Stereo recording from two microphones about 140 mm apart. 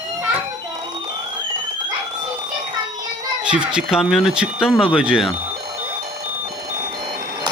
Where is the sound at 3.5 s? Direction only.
5° right (ahead or behind).